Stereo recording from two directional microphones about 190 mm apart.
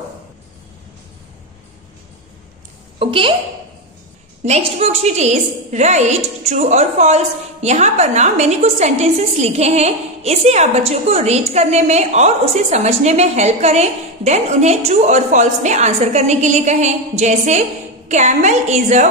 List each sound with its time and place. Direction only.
3.0 s a woman's voice: 30° right (ahead or behind)
4.5 s a woman's voice: 35° right (ahead or behind)